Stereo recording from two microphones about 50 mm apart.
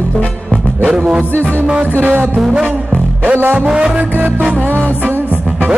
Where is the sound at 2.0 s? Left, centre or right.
Right.